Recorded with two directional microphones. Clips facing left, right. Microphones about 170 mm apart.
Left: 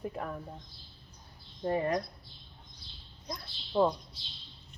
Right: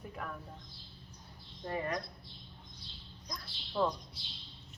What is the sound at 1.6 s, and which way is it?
Speech, 25° left (ahead or behind).